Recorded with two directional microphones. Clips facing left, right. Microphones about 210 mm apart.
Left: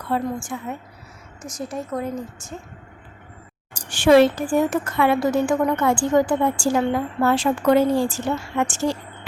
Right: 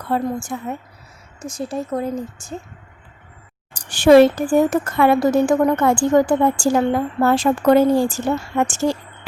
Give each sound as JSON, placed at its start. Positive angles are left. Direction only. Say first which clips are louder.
{"t": 0.1, "sound": "speech", "louder": "right 3 dB", "side_deg": -40}
{"t": 1.4, "sound": "speech", "louder": "right 4 dB", "side_deg": -30}
{"t": 3.8, "sound": "a woman's voice", "louder": "right 4 dB", "side_deg": -40}